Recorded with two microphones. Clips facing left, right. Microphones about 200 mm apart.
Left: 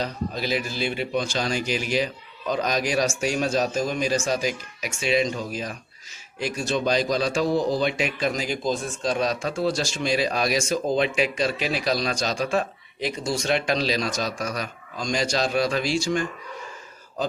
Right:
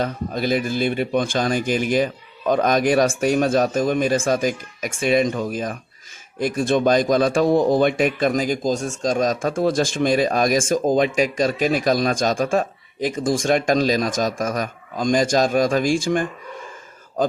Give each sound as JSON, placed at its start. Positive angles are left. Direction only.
{"t": 0.0, "sound": "a man's voice", "side_deg": -50}